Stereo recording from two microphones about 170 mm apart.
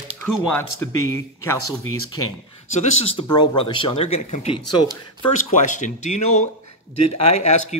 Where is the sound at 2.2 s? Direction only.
20° left (ahead or behind).